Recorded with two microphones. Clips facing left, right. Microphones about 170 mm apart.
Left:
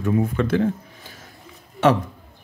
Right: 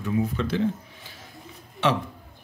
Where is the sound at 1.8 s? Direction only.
45° left (ahead or behind).